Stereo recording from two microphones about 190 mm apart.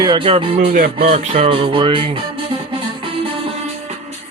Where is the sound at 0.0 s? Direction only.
25° right (ahead or behind).